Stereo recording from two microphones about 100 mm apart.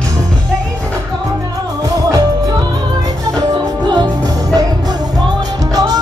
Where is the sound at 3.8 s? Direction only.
50° right (ahead or behind).